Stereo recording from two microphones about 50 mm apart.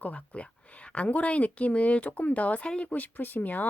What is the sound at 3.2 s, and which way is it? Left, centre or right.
Speech, left.